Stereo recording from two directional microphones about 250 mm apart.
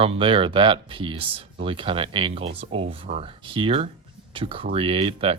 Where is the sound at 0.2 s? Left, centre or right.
Centre.